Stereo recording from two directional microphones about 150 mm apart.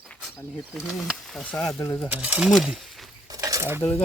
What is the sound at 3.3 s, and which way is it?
Dishes, 25° right (ahead or behind).